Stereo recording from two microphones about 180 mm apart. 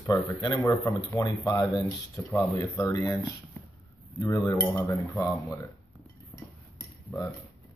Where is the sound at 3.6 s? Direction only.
10° left (ahead or behind).